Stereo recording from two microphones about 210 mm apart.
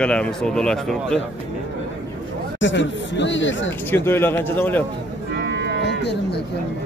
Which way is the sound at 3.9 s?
10° left (ahead or behind).